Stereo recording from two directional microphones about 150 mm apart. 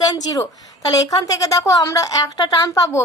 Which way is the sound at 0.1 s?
25° left (ahead or behind).